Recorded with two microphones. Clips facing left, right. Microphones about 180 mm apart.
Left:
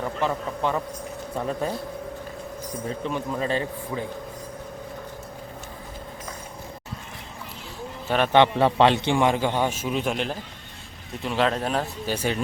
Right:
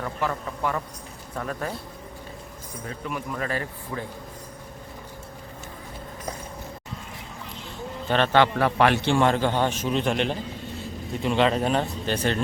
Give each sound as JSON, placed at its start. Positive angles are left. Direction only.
{"t": 0.0, "sound": "a man's voice", "side_deg": 20}
{"t": 3.0, "sound": "a man's voice", "side_deg": 25}
{"t": 8.0, "sound": "a man's voice", "side_deg": 5}
{"t": 8.3, "sound": "a man's voice", "side_deg": 20}